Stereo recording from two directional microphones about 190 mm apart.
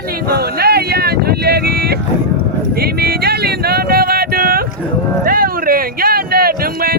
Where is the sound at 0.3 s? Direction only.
55° right (ahead or behind).